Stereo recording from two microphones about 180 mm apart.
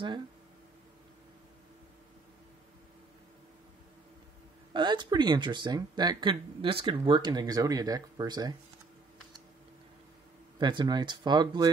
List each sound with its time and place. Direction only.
4.7 s speech: 25° right (ahead or behind)
10.6 s speech: 25° right (ahead or behind)